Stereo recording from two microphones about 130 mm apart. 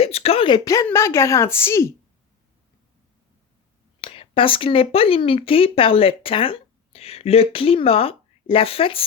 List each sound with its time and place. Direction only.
0.0 s speech: 50° left (ahead or behind)
0.6 s a woman's voice: 25° left (ahead or behind)
4.0 s speech: 45° left (ahead or behind)